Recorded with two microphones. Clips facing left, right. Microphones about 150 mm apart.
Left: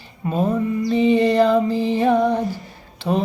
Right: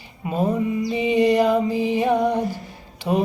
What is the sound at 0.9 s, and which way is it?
Music, 10° right (ahead or behind).